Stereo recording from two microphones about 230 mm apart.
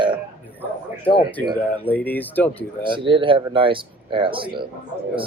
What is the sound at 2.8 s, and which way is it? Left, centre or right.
Speech, right.